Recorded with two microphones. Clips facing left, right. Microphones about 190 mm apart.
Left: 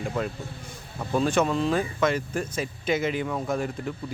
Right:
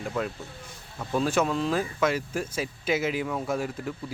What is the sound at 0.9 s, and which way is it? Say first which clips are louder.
A man's voice: left 2 dB; centre (ahead or behind).